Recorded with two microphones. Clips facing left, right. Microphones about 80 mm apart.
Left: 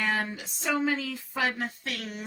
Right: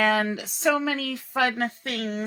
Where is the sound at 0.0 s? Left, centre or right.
Right.